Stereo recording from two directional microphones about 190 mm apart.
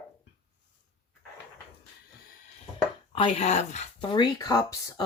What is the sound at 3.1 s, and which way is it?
Speech, 30° left (ahead or behind).